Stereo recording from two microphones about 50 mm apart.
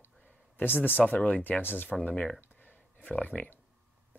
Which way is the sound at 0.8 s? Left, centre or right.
Left.